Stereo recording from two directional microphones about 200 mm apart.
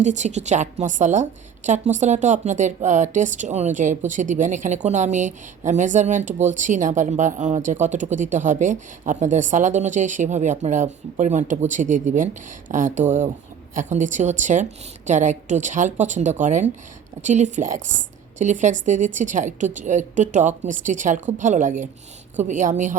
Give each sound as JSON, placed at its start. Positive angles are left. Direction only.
{"t": 0.0, "sound": "a woman's voice", "side_deg": -35}